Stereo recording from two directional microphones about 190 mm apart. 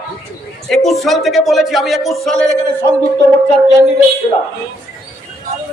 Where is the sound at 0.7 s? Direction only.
Centre (ahead or behind).